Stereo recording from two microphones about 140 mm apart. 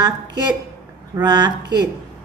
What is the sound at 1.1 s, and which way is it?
Speech, 30° right (ahead or behind).